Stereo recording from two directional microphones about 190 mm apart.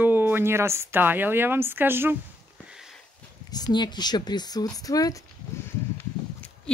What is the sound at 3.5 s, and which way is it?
A woman's voice, 20° left (ahead or behind).